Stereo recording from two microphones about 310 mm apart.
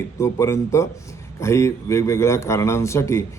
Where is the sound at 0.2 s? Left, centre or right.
Centre.